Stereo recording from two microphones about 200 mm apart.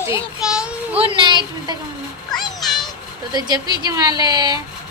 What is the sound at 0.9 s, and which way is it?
Speech, 25° right (ahead or behind).